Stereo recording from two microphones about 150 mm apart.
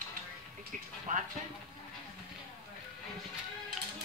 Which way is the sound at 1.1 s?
60° right (ahead or behind).